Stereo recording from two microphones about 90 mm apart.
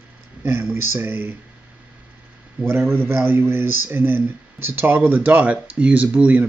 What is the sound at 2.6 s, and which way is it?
Speech, 25° right (ahead or behind).